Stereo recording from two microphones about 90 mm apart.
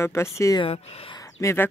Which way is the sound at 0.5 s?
90° left.